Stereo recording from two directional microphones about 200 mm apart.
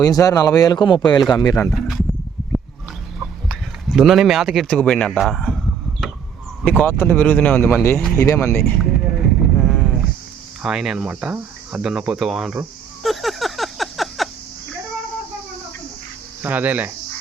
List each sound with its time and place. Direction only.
0.0 s speech: 20° left (ahead or behind)
1.7 s speech: centre (ahead or behind)
3.5 s a man's voice: centre (ahead or behind)
8.8 s a sound: centre (ahead or behind)
10.6 s speech: centre (ahead or behind)
16.4 s speech: 10° right (ahead or behind)